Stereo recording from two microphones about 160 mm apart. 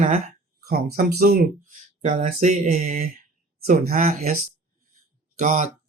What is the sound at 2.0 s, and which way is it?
Speech, 50° right (ahead or behind).